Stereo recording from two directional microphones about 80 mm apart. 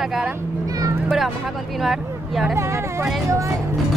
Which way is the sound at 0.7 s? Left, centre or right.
Right.